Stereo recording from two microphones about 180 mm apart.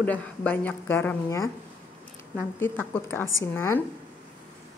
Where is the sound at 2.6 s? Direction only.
10° left (ahead or behind).